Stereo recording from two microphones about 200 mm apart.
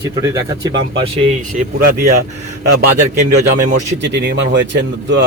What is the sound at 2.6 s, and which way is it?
A man's voice, 50° right (ahead or behind).